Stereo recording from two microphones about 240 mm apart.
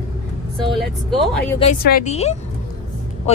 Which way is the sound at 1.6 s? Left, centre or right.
Left.